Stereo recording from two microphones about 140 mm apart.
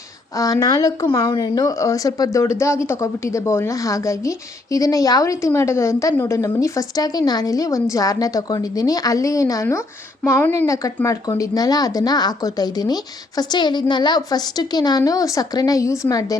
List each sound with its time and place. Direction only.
0.3 s speech: 25° left (ahead or behind)